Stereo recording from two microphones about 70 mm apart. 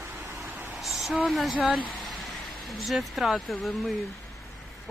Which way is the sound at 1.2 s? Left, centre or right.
Centre.